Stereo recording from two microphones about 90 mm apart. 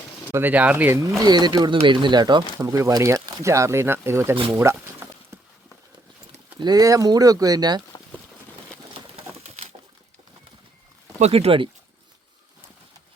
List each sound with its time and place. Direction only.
0.3 s speech: 20° right (ahead or behind)
1.2 s speech: 50° right (ahead or behind)
2.6 s speech: 40° right (ahead or behind)
3.4 s speech: 35° right (ahead or behind)
4.5 s a sound: 30° right (ahead or behind)
6.6 s speech: 45° right (ahead or behind)
11.3 s speech: 90° right